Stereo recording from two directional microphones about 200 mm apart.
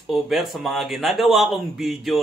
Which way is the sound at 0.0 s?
Centre (ahead or behind).